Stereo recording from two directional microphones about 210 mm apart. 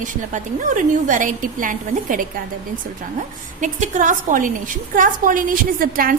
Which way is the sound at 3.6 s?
35° right (ahead or behind).